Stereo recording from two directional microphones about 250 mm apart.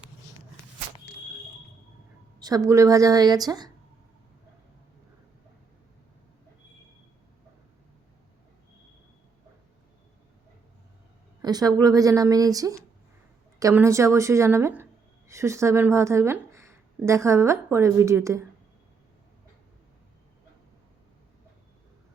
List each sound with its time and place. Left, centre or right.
2.4 s speech: centre
11.4 s a sound: centre
11.8 s speech: centre